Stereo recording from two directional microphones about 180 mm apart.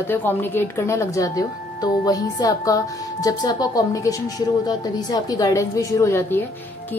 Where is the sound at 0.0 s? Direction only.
10° left (ahead or behind).